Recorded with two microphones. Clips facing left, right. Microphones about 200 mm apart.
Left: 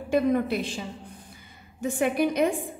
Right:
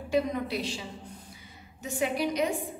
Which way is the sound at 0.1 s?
55° left (ahead or behind).